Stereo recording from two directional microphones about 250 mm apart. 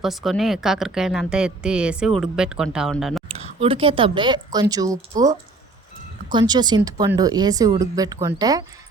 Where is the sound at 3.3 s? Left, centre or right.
Right.